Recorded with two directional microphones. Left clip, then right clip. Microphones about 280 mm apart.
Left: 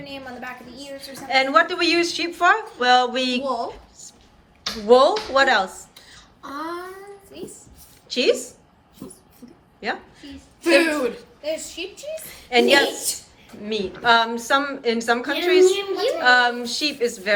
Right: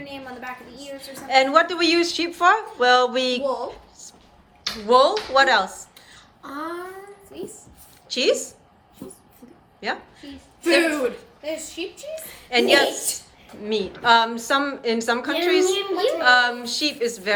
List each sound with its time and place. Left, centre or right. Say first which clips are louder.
0.8 s a woman's voice: even; centre
1.3 s speech: right 1 dB; centre
3.4 s speech: even; left
3.7 s a sound: left 1 dB; centre
4.9 s speech: left 2 dB; centre
8.1 s speech: left 1 dB; centre
9.8 s a woman's voice: even; centre